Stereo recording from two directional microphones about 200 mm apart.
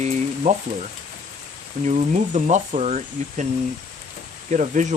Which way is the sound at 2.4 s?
35° right (ahead or behind).